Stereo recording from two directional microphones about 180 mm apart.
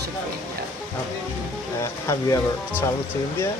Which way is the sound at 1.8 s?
15° left (ahead or behind).